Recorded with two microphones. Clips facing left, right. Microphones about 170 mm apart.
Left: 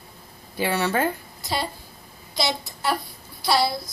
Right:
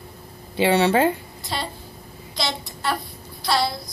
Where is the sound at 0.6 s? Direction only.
25° right (ahead or behind).